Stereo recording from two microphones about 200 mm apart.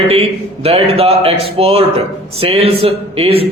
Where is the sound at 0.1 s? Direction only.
30° right (ahead or behind).